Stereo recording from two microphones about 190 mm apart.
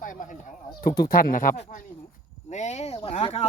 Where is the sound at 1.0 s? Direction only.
50° left (ahead or behind).